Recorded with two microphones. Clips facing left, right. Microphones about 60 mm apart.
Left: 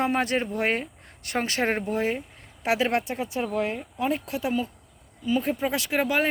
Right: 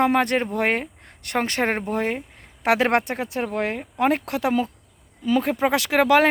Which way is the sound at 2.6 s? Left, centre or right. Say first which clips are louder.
Right 5 dB; right.